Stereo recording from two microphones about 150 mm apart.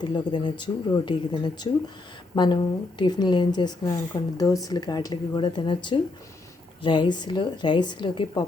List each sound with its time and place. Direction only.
0.0 s speech: 30° left (ahead or behind)